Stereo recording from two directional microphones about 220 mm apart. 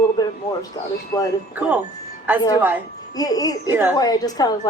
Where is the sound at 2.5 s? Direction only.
10° right (ahead or behind).